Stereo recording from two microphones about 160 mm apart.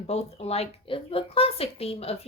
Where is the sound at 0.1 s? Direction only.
40° left (ahead or behind).